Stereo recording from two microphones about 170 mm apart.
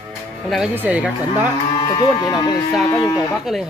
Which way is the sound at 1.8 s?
25° left (ahead or behind).